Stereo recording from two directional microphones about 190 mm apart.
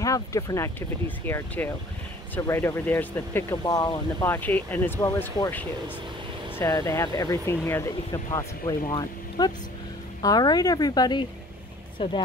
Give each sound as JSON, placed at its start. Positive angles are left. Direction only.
{"t": 0.0, "sound": "a woman's voice", "side_deg": 15}